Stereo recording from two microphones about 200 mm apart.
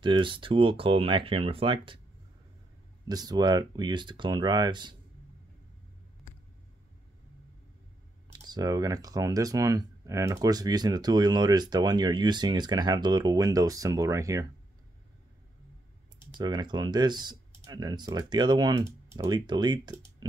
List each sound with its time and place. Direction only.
0.0 s speech: 25° right (ahead or behind)
3.1 s speech: 20° right (ahead or behind)
8.3 s speech: 20° right (ahead or behind)
16.3 s speech: 20° right (ahead or behind)